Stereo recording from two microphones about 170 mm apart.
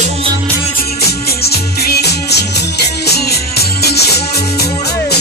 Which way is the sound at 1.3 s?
65° left (ahead or behind).